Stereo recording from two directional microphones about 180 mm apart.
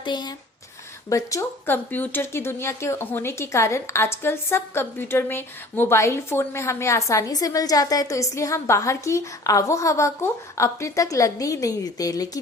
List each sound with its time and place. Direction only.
0.0 s speech: 25° left (ahead or behind)